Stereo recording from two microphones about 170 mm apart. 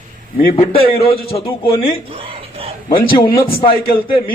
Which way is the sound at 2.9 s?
30° left (ahead or behind).